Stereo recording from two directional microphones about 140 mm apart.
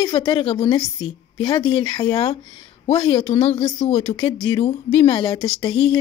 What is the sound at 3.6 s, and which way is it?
Speech, 30° left (ahead or behind).